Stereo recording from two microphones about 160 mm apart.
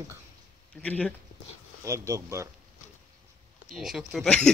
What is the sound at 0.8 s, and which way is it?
Speech, 10° left (ahead or behind).